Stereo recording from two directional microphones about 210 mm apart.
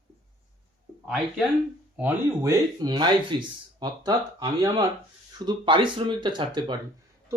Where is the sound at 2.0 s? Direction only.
10° right (ahead or behind).